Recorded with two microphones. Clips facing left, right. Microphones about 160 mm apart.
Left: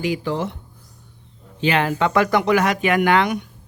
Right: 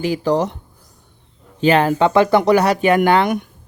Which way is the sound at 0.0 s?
40° right (ahead or behind).